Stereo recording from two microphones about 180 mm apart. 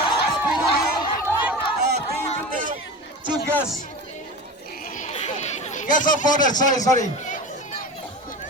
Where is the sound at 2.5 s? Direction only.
50° right (ahead or behind).